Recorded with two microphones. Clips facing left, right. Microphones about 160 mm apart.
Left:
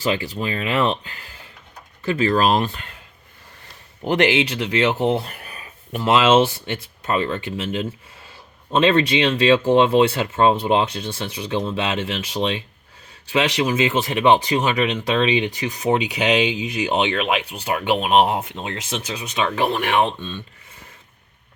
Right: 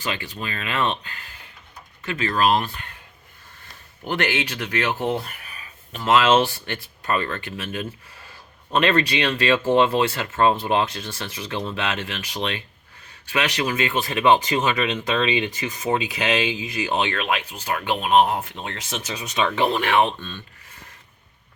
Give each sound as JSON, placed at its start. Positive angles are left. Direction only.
{"t": 0.4, "sound": "speech", "side_deg": 25}
{"t": 2.0, "sound": "speech", "side_deg": 35}
{"t": 4.1, "sound": "speech", "side_deg": 20}